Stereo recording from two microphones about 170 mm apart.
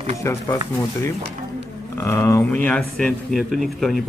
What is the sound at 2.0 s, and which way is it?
Speech, 15° left (ahead or behind).